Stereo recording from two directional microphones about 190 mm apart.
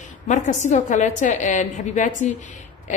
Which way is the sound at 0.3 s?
40° left (ahead or behind).